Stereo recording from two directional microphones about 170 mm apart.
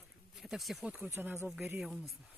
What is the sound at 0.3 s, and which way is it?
Speech, centre (ahead or behind).